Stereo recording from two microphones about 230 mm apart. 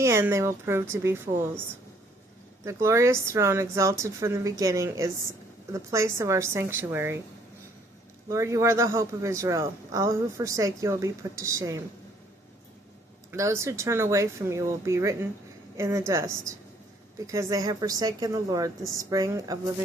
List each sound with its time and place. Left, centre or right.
0.0 s a man's voice: centre
2.6 s a man's voice: centre
8.3 s a man's voice: centre
13.3 s a man's voice: centre